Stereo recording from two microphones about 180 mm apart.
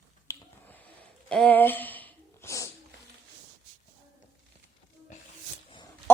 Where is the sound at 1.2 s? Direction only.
5° left (ahead or behind).